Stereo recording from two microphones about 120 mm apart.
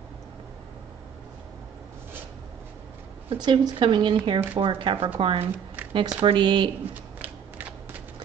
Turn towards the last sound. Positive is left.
turn(degrees=-15)  # may be behind; listen again after turning